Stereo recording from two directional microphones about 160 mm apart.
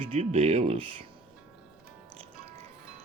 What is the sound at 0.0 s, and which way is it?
Speech, 40° right (ahead or behind).